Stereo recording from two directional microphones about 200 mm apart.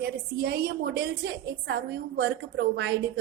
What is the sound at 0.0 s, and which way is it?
A woman's voice, 50° right (ahead or behind).